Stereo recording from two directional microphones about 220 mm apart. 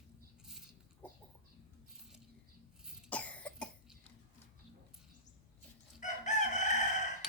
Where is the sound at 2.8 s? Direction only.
5° left (ahead or behind).